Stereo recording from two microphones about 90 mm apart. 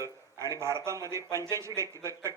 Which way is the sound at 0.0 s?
35° right (ahead or behind).